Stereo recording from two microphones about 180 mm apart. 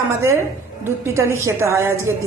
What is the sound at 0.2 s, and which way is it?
A woman's voice, 15° right (ahead or behind).